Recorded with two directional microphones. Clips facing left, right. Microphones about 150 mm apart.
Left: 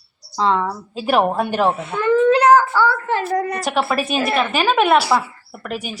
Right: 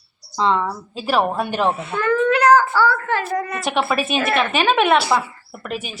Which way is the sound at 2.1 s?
30° left (ahead or behind).